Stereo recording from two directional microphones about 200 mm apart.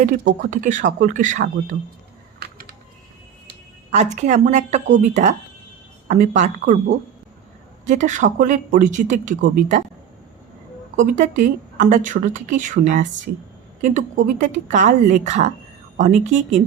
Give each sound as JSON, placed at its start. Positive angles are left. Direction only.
{"t": 0.0, "sound": "speech", "side_deg": -40}
{"t": 2.4, "sound": "typing", "side_deg": -50}
{"t": 3.9, "sound": "speech", "side_deg": -35}
{"t": 10.9, "sound": "speech", "side_deg": -40}